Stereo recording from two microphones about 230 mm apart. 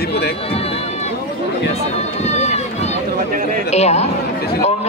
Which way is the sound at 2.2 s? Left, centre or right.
Left.